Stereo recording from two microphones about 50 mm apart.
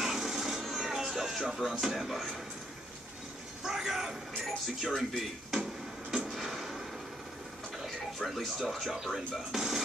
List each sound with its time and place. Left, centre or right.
0.0 s music: centre
3.6 s speech: centre
6.1 s drawer open or close: centre
7.8 s speech: centre